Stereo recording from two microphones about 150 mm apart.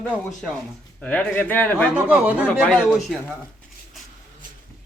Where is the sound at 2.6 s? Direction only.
5° left (ahead or behind).